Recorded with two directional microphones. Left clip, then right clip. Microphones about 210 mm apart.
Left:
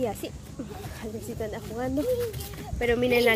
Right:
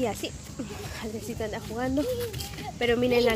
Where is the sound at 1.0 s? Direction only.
10° right (ahead or behind).